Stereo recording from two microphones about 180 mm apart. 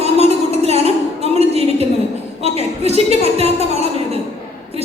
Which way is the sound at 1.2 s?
35° right (ahead or behind).